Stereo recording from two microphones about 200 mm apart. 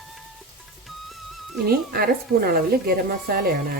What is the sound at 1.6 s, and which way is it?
Speech, 50° right (ahead or behind).